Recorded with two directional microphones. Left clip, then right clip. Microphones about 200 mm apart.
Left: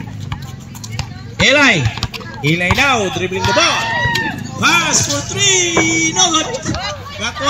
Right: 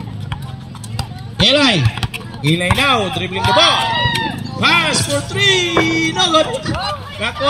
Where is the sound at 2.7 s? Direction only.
50° left (ahead or behind).